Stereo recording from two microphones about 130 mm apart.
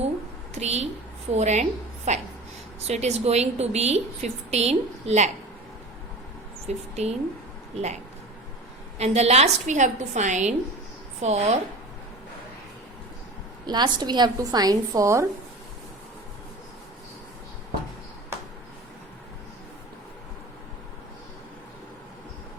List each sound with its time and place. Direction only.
0.5 s a woman's voice: 55° right (ahead or behind)
6.7 s a woman's voice: 55° right (ahead or behind)
13.7 s a woman's voice: 35° right (ahead or behind)
18.3 s a sound: 20° right (ahead or behind)